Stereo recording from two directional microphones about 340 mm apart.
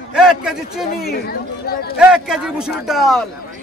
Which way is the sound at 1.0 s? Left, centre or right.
Left.